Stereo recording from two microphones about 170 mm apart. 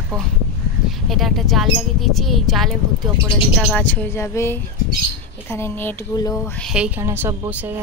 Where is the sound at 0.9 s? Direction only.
Centre (ahead or behind); by 6.5 s 20° left (ahead or behind).